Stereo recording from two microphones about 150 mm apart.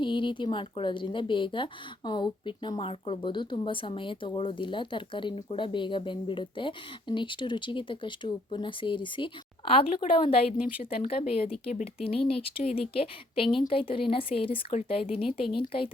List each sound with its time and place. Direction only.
0.0 s a woman's voice: 30° left (ahead or behind)